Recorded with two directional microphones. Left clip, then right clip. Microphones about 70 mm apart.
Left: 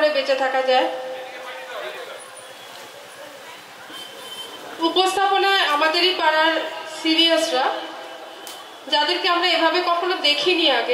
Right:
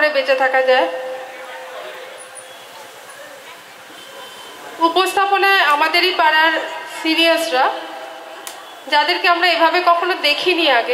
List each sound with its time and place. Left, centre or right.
0.0 s a woman's voice: right
4.8 s a woman's voice: right
8.8 s a woman's voice: right